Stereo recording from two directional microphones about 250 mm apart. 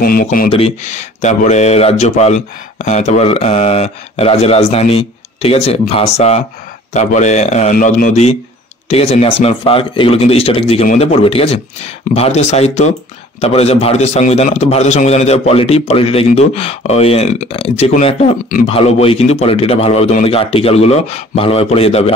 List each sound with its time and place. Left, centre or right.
0.0 s speech: left
0.5 s speech: left